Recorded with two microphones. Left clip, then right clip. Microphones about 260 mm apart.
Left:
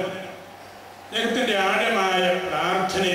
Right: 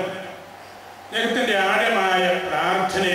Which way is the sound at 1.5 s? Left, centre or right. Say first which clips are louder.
Right 3 dB; centre.